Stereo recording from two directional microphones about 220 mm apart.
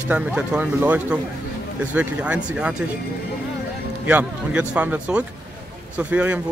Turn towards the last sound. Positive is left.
turn(degrees=-5)  # may be behind; listen again after turning